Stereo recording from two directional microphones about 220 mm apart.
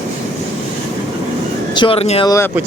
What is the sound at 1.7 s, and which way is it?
Speech, 20° left (ahead or behind).